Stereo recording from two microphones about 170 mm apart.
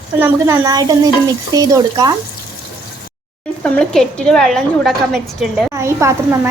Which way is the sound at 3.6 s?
5° left (ahead or behind).